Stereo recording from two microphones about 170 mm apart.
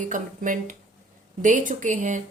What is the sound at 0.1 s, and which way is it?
Speech, 50° right (ahead or behind).